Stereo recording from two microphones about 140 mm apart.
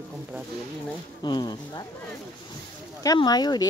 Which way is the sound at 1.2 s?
30° left (ahead or behind).